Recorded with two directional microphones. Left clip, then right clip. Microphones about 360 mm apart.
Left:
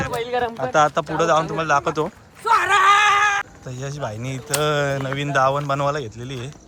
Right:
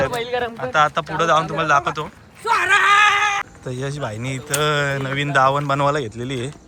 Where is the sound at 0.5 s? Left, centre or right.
Centre.